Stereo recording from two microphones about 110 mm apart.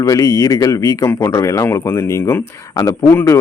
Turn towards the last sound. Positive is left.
turn(degrees=25)  # may be behind; listen again after turning